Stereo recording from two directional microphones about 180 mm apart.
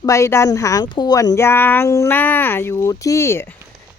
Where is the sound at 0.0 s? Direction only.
15° left (ahead or behind).